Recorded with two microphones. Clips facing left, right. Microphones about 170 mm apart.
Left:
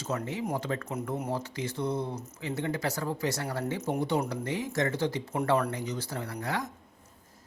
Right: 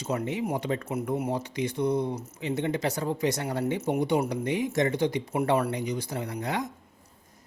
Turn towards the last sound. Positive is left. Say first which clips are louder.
# right 3 dB
turn(degrees=-20)  # may be behind; listen again after turning